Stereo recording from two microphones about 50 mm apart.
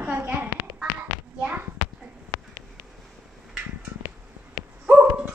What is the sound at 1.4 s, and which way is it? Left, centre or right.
Hands, right.